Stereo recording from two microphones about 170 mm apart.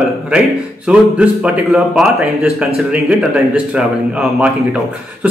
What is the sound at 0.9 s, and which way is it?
A man's voice, 5° right (ahead or behind).